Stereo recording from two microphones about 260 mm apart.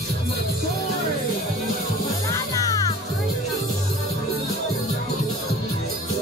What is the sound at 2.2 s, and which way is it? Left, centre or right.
Music, centre.